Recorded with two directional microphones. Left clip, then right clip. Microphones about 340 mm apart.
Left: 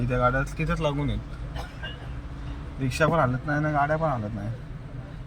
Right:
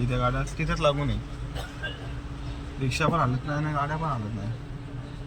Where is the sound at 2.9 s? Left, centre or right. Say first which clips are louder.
Left 3 dB; centre.